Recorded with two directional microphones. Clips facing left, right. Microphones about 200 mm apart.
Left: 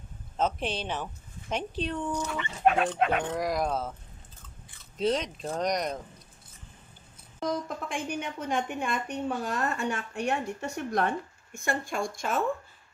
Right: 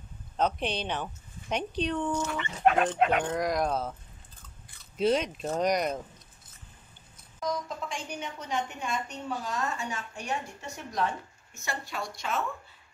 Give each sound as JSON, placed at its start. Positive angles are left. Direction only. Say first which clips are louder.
{"t": 0.4, "sound": "a woman's voice", "louder": "right 1 dB", "side_deg": 5}
{"t": 7.3, "sound": "a woman's voice", "louder": "left 2 dB", "side_deg": 55}